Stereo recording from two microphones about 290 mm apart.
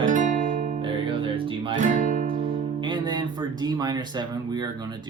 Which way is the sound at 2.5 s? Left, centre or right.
Centre.